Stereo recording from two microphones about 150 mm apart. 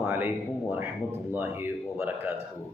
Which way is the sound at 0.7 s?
15° right (ahead or behind).